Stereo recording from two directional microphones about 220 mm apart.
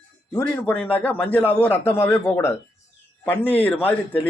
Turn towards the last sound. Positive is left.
turn(degrees=10)  # may be behind; listen again after turning